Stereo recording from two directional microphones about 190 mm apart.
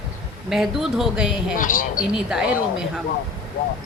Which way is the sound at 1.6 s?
45° left (ahead or behind).